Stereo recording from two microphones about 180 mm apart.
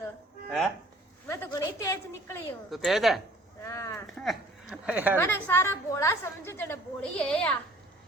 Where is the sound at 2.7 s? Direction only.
Centre (ahead or behind).